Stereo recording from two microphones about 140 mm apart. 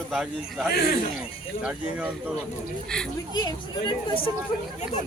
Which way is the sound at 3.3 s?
30° left (ahead or behind).